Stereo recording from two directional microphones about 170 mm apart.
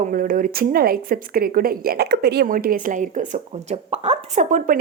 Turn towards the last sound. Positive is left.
turn(degrees=-50)  # may be behind; listen again after turning